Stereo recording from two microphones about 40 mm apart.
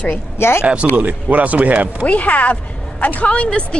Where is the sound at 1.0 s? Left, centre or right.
Right.